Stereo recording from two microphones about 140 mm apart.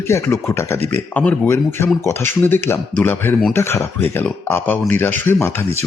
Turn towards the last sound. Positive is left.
turn(degrees=15)  # may be behind; listen again after turning